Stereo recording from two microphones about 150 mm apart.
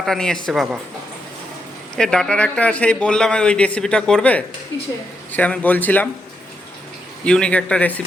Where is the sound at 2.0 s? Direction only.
5° left (ahead or behind).